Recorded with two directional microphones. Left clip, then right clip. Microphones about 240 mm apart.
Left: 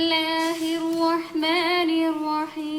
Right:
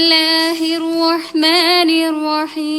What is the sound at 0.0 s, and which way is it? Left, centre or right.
Female singing, right.